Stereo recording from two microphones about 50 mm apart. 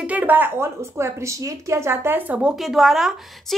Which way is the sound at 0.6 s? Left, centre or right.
Right.